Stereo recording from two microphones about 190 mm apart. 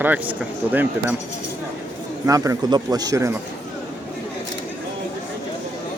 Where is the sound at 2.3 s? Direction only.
20° right (ahead or behind).